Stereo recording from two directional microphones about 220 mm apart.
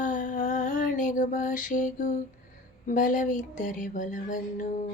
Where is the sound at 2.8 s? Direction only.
35° left (ahead or behind).